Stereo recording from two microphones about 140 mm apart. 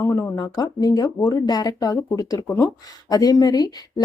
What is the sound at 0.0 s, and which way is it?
Speech, 20° left (ahead or behind).